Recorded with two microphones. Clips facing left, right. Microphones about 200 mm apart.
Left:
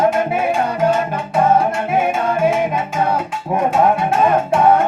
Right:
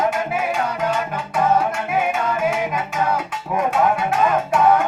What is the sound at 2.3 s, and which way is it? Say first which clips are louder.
Music: left 5 dB; 30° left (ahead or behind).